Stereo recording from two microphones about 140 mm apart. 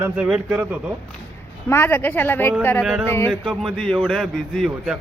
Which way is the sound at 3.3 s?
Centre (ahead or behind).